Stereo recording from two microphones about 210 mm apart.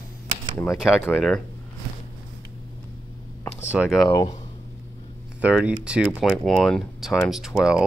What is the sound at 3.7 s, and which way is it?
Speech, 5° right (ahead or behind).